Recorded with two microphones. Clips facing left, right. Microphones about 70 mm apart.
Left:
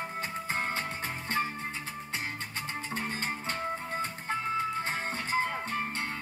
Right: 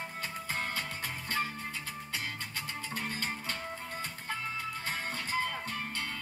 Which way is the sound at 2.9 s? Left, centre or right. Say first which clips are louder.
Left 2 dB; left.